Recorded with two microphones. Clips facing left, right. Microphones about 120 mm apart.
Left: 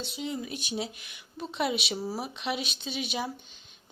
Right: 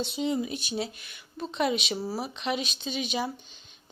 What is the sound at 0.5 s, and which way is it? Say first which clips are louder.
A woman's voice: right 2 dB; 10° left (ahead or behind).